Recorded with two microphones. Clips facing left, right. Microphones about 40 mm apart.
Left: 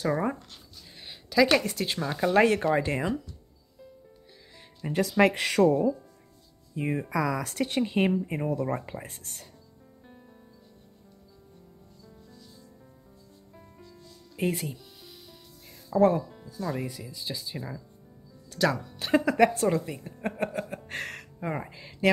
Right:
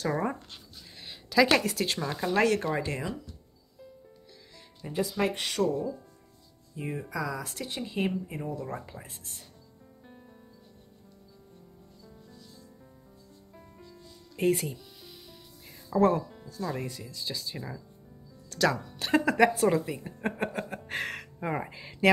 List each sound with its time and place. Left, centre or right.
0.0 s zipper: centre
1.0 s speech: centre
2.0 s speech: centre
2.4 s speech: left
5.0 s speech: left
6.7 s speech: left
7.1 s speech: left
13.7 s music: centre
16.0 s speech: centre
17.2 s speech: left
17.6 s speech: centre